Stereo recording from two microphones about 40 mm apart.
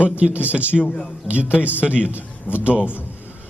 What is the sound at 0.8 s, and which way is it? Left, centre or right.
Speech, left.